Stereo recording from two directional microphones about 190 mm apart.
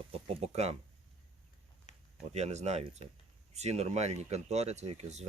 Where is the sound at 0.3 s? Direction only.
30° right (ahead or behind).